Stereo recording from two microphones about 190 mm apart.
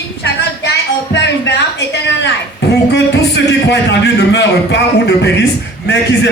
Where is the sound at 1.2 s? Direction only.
65° left (ahead or behind).